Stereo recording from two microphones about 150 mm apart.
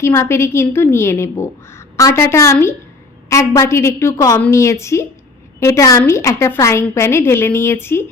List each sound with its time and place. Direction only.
0.0 s a woman's voice: 15° left (ahead or behind)